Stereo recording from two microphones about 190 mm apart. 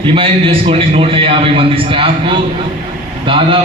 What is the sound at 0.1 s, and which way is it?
A man's voice, 30° right (ahead or behind).